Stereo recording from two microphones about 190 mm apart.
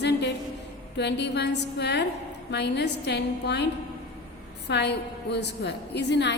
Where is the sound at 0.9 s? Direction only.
65° left (ahead or behind).